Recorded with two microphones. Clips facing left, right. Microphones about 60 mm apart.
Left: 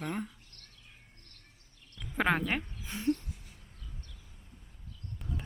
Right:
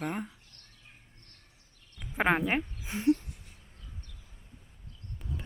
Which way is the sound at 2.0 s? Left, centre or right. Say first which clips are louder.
Right 2 dB; centre.